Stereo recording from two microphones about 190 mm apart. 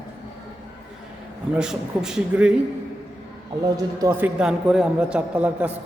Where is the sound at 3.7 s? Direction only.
15° right (ahead or behind).